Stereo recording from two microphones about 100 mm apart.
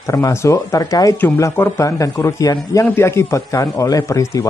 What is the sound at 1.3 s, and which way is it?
A man's voice, 25° left (ahead or behind).